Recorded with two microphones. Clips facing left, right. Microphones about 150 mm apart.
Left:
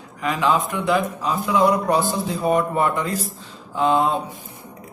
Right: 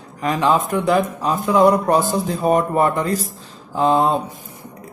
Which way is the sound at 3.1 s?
Centre (ahead or behind).